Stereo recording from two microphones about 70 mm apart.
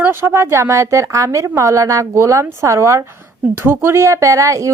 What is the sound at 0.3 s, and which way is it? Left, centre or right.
Speech, right.